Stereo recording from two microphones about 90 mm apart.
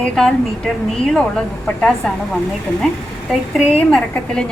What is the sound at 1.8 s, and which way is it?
Speech, 5° left (ahead or behind).